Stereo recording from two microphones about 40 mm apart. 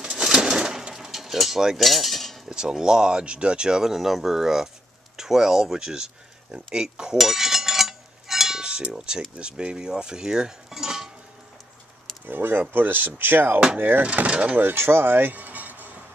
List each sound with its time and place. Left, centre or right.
0.0 s bird: centre
0.9 s cutlery: centre
2.5 s cutlery: centre
3.9 s speech: centre
7.2 s a sound: centre
8.9 s cutlery: right
12.3 s speech: right
14.0 s speech: right
14.6 s speech: right